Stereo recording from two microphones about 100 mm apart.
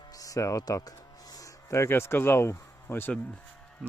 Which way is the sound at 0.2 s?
35° left (ahead or behind).